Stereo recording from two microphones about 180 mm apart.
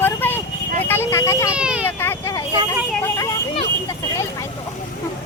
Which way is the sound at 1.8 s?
10° left (ahead or behind).